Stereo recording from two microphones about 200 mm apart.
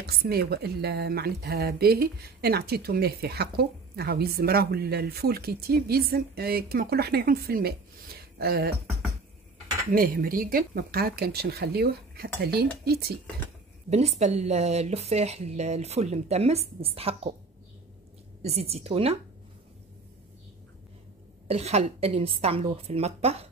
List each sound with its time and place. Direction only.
0.0 s a woman's voice: 50° right (ahead or behind)
9.8 s a woman's voice: 45° right (ahead or behind)
13.8 s a woman's voice: 35° right (ahead or behind)
18.4 s a woman's voice: 30° right (ahead or behind)
21.5 s a woman's voice: 30° right (ahead or behind)